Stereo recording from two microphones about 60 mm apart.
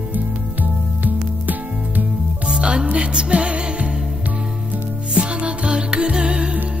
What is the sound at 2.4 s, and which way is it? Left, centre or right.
Music, centre.